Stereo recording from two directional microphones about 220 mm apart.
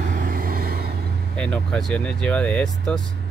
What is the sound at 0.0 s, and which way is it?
Vehicle, 40° right (ahead or behind).